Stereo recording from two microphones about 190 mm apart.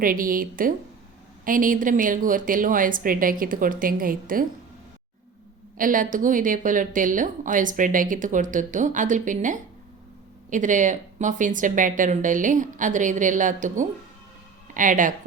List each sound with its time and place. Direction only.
0.0 s a woman's voice: 45° right (ahead or behind)
5.7 s a woman's voice: 45° right (ahead or behind)